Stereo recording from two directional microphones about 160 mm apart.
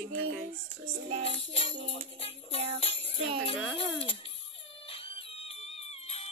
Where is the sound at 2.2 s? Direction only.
40° left (ahead or behind).